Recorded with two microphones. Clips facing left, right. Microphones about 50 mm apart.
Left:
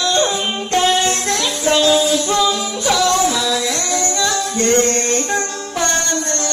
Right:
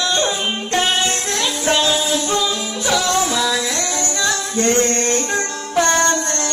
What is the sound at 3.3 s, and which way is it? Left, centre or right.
Music, centre.